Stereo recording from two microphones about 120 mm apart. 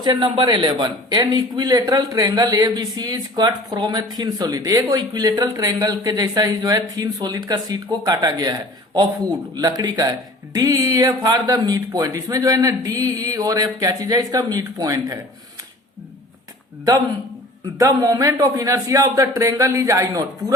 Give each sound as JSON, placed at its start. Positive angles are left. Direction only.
{"t": 0.0, "sound": "a man's voice", "side_deg": -40}
{"t": 9.6, "sound": "a man's voice", "side_deg": -30}
{"t": 17.7, "sound": "a man's voice", "side_deg": -30}